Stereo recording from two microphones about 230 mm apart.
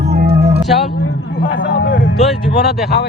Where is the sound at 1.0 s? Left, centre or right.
Left.